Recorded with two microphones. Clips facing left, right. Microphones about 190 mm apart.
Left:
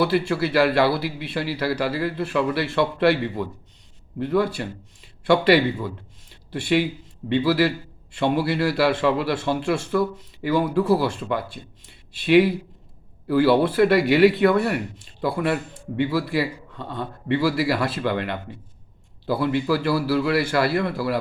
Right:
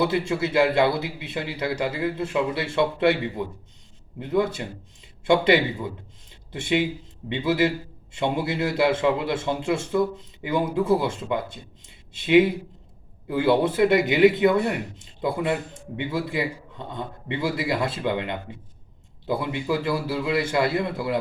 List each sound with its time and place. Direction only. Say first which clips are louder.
0.0 s speech: left 2 dB; 20° right (ahead or behind)